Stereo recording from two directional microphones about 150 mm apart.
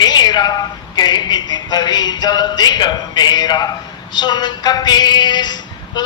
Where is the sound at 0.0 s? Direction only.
30° left (ahead or behind).